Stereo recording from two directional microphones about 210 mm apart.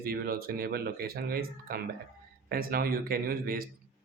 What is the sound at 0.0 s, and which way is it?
Speech, 45° right (ahead or behind).